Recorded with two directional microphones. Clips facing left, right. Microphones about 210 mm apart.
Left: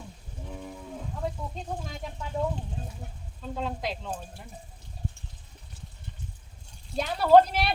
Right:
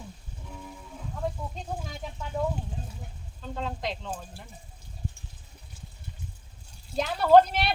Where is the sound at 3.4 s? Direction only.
5° left (ahead or behind).